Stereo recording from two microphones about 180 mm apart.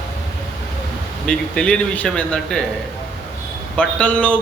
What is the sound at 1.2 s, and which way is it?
Speech, 5° left (ahead or behind).